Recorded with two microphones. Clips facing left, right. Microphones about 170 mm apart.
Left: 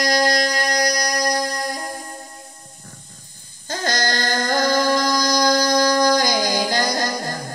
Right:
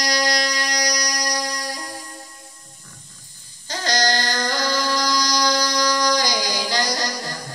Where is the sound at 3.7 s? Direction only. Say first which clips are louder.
Right 1 dB; 50° left (ahead or behind).